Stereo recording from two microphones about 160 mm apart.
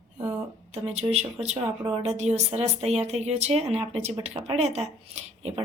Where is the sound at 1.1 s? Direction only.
40° right (ahead or behind).